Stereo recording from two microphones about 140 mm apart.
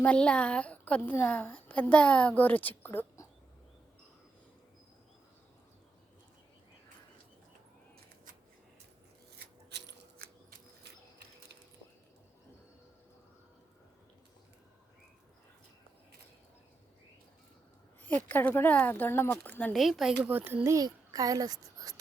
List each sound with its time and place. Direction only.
0.0 s a woman's voice: 5° left (ahead or behind)
18.3 s a woman's voice: 15° left (ahead or behind)
19.7 s a woman's voice: centre (ahead or behind)
20.2 s a child's voice: 15° right (ahead or behind)